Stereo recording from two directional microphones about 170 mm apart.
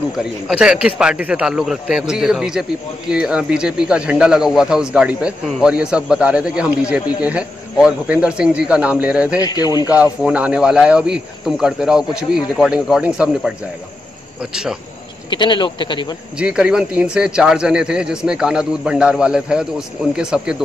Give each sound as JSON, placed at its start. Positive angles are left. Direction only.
{"t": 0.2, "sound": "speech", "side_deg": -5}
{"t": 9.4, "sound": "speech", "side_deg": 25}
{"t": 9.8, "sound": "speech", "side_deg": -10}
{"t": 15.2, "sound": "speech", "side_deg": 25}
{"t": 16.3, "sound": "speech", "side_deg": -5}